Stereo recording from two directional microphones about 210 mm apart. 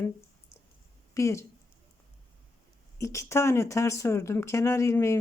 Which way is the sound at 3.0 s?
15° left (ahead or behind).